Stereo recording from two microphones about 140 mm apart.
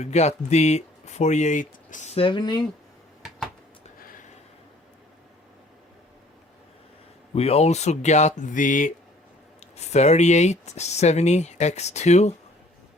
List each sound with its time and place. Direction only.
0.0 s speech: 55° left (ahead or behind)
2.1 s speech: 35° left (ahead or behind)
7.3 s speech: 45° left (ahead or behind); by 8.9 s 70° left (ahead or behind)
9.7 s speech: 50° left (ahead or behind)